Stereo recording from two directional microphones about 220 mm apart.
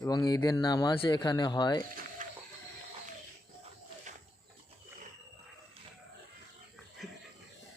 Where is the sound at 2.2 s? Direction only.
35° right (ahead or behind).